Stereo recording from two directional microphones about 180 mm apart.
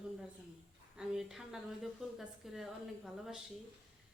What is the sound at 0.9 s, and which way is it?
A woman's voice, centre (ahead or behind).